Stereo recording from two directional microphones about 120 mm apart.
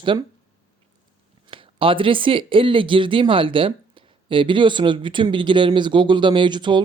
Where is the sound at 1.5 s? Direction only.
45° right (ahead or behind).